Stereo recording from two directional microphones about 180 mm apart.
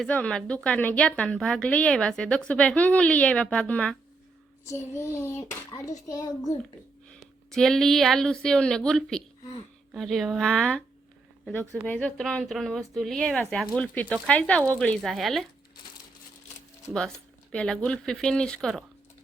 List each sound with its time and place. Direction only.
0.0 s a woman's voice: 5° left (ahead or behind)
4.7 s child singing: 15° left (ahead or behind)
7.1 s a woman's voice: centre (ahead or behind)
11.9 s a woman's voice: 5° left (ahead or behind)
17.5 s a woman's voice: 5° left (ahead or behind)